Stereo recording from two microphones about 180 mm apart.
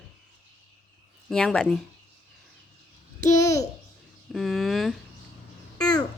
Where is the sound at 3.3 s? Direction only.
20° left (ahead or behind).